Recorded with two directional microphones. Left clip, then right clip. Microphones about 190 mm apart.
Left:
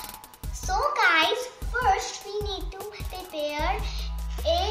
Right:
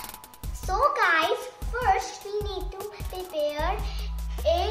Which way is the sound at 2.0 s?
10° right (ahead or behind).